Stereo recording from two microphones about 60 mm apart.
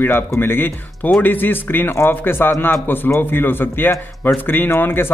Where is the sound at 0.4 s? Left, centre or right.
Left.